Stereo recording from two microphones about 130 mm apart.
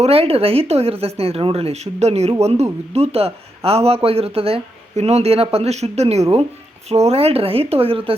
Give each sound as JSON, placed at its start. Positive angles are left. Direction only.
{"t": 0.0, "sound": "speech", "side_deg": -50}